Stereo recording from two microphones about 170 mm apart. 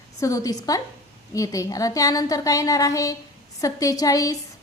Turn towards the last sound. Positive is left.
turn(degrees=20)  # may be behind; listen again after turning